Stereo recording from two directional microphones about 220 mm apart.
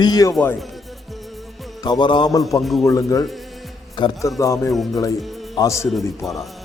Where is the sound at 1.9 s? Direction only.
20° left (ahead or behind).